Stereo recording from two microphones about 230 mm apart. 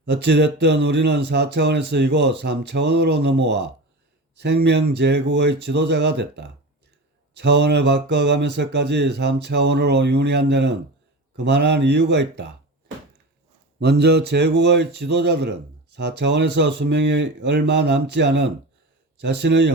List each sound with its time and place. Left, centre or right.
0.0 s speech: right
13.7 s speech: right